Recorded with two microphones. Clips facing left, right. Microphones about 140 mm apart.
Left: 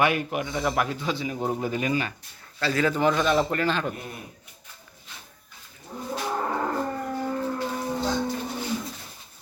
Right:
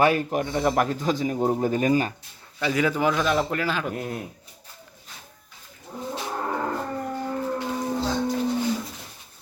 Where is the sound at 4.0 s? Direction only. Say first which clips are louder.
Right 7 dB; 90° right.